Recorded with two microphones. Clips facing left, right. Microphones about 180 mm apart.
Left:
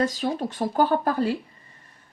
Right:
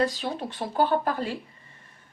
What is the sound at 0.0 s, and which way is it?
Speech, 40° left (ahead or behind).